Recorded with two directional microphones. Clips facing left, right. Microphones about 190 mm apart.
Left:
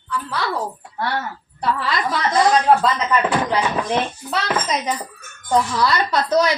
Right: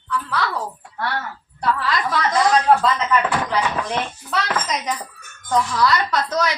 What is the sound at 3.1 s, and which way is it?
Speech, 15° left (ahead or behind).